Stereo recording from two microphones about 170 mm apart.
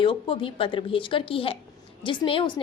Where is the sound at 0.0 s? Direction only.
30° left (ahead or behind).